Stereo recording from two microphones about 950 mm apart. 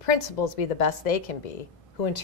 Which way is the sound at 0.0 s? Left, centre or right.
Left.